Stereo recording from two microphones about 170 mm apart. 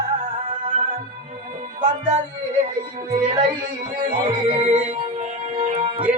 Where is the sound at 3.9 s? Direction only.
30° right (ahead or behind).